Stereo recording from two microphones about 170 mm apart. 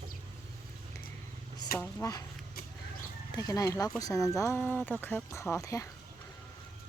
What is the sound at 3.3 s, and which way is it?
Speech, 20° left (ahead or behind).